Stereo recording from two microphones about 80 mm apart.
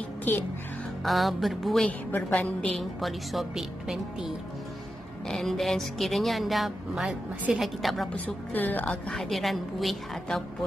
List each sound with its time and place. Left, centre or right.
0.2 s a child's voice: left
1.0 s speech: centre
1.9 s a woman's voice: centre
2.8 s speech: centre
5.3 s speech: centre
8.5 s speech: left
8.8 s speech: centre